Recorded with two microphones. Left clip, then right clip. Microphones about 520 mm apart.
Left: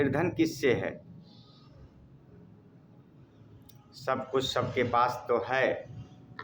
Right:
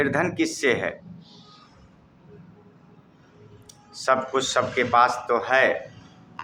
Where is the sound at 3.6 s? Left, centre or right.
Left.